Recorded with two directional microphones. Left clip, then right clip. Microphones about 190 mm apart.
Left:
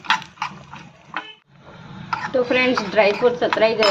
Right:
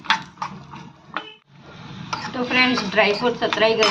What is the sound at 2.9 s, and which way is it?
Speech, 40° left (ahead or behind).